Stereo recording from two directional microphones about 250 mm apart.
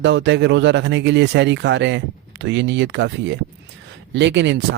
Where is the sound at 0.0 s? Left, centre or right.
Right.